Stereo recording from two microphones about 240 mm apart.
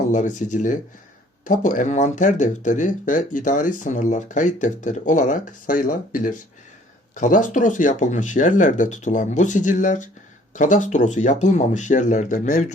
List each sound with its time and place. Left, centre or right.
0.1 s speech: left